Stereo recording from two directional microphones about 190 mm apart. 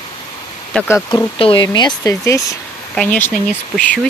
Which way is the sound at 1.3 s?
30° left (ahead or behind).